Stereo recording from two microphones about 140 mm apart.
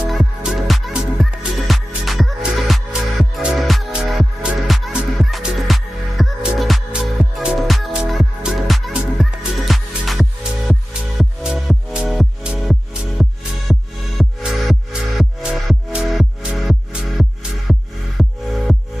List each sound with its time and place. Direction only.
0.0 s music: 5° right (ahead or behind)